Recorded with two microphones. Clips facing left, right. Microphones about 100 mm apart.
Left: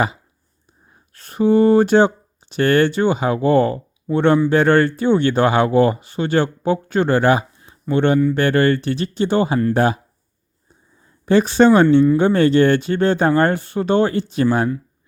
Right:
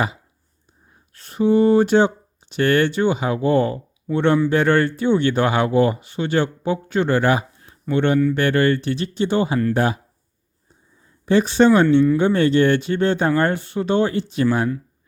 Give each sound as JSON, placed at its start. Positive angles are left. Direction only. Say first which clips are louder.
{"t": 1.1, "sound": "speech", "louder": "left 2 dB", "side_deg": 50}
{"t": 11.3, "sound": "speech", "louder": "left 2 dB", "side_deg": 45}